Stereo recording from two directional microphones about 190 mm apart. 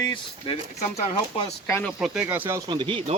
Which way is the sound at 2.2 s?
10° right (ahead or behind).